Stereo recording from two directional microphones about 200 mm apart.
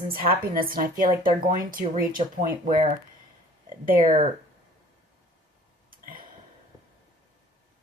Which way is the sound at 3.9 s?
45° right (ahead or behind).